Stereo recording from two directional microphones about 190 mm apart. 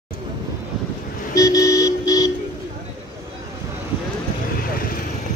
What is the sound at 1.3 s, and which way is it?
Vehicle, 15° left (ahead or behind).